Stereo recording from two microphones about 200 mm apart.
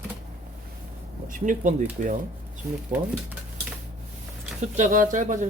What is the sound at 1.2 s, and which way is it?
Speech, 40° right (ahead or behind).